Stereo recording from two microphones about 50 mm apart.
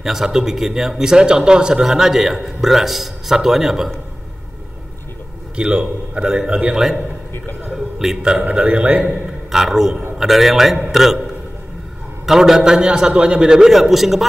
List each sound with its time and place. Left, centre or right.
0.0 s speech: centre
5.6 s speech: centre
7.7 s a sound: centre
8.5 s a man's voice: right
9.5 s a man's voice: centre
12.3 s speech: centre